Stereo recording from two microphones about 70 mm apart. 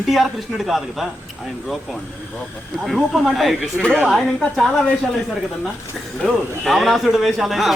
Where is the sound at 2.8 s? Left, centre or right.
Centre.